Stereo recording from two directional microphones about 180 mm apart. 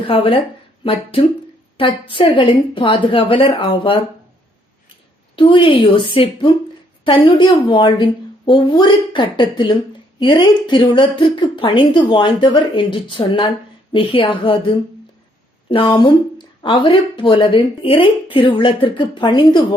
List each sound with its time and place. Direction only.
0.1 s speech: 30° left (ahead or behind)
1.8 s a woman's voice: 30° left (ahead or behind)
5.4 s a woman's voice: 30° left (ahead or behind)